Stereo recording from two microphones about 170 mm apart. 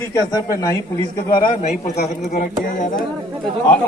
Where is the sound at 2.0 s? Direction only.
55° left (ahead or behind).